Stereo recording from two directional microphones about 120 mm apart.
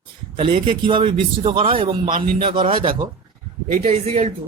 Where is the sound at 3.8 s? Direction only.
65° right (ahead or behind).